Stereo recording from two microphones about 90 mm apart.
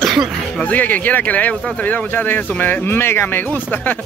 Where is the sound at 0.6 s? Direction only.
20° left (ahead or behind).